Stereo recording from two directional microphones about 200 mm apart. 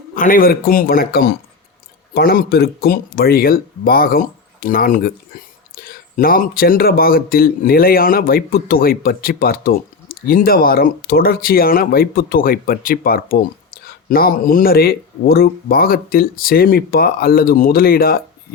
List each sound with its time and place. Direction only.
0.1 s speech: 40° left (ahead or behind)